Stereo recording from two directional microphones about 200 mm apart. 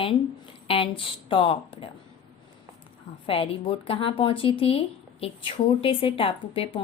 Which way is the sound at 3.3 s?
30° left (ahead or behind).